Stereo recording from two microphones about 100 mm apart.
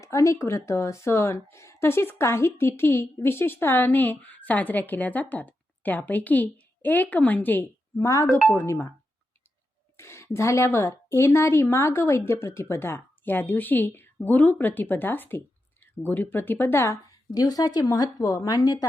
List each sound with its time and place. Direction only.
0.0 s a woman's voice: 30° left (ahead or behind)
7.9 s a woman's voice: 30° left (ahead or behind)
10.0 s a woman's voice: 30° left (ahead or behind)